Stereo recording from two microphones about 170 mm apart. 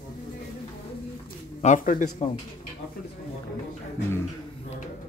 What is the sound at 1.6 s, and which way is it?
Speech, 50° left (ahead or behind).